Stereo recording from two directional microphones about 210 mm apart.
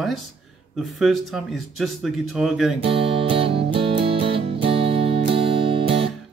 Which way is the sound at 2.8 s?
25° right (ahead or behind).